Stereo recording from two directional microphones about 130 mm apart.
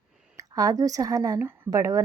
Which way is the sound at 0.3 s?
25° right (ahead or behind).